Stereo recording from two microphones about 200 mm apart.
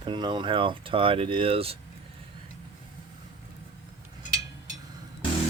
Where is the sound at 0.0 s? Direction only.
25° right (ahead or behind).